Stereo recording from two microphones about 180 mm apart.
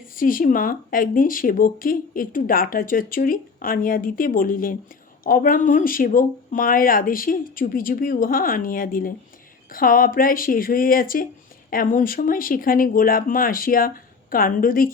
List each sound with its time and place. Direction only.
0.2 s speech: 50° left (ahead or behind)